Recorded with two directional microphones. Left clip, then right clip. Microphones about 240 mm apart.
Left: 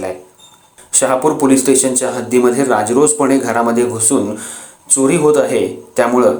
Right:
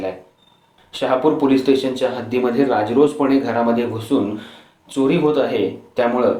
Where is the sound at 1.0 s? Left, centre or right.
Left.